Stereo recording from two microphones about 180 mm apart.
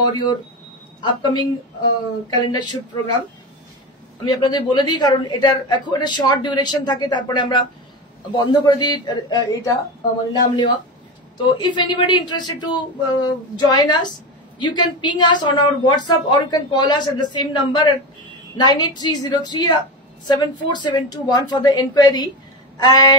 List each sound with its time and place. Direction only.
1.0 s a man's voice: 25° left (ahead or behind)
4.2 s a man's voice: 25° left (ahead or behind)
11.5 s a man's voice: 25° left (ahead or behind)